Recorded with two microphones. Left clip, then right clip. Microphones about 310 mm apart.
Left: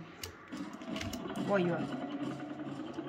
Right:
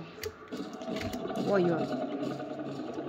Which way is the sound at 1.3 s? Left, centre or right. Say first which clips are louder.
Right 3 dB; right.